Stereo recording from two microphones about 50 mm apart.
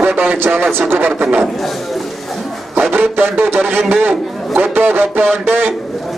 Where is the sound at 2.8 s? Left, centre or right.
Right.